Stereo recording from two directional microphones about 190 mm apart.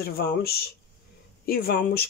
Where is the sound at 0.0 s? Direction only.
55° left (ahead or behind).